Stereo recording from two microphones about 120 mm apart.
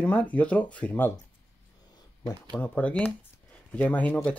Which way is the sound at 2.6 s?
15° left (ahead or behind).